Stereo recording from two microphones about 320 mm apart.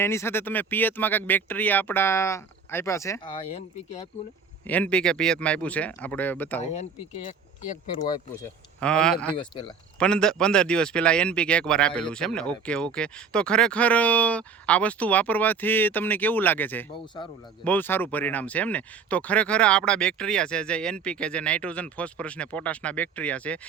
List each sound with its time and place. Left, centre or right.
0.0 s speech: centre
4.6 s speech: centre
7.9 s speech: centre
8.8 s speech: centre
9.4 s speech: centre
10.0 s speech: centre